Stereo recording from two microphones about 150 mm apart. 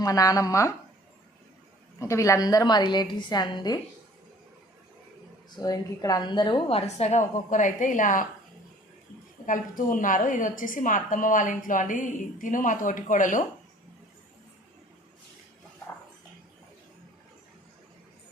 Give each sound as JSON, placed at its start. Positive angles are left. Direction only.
{"t": 0.0, "sound": "a woman's voice", "side_deg": 25}
{"t": 2.0, "sound": "a woman's voice", "side_deg": 20}
{"t": 5.5, "sound": "a woman's voice", "side_deg": 25}
{"t": 9.5, "sound": "a woman's voice", "side_deg": 65}